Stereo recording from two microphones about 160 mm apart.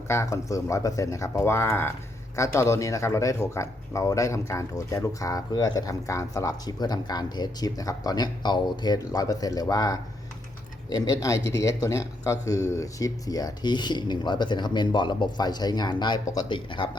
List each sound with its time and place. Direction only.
0.1 s speech: 20° left (ahead or behind)